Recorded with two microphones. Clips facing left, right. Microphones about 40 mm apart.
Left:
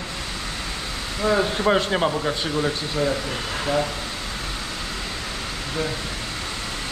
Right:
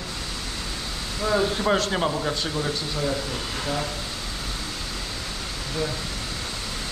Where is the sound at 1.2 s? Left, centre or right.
Centre.